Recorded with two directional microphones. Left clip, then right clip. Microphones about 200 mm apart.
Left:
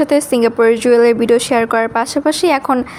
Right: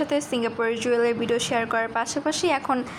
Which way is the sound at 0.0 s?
50° left (ahead or behind).